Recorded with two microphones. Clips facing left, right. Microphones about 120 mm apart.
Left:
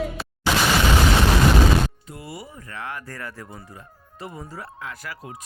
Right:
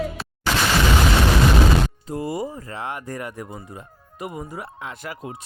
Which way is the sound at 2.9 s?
20° right (ahead or behind).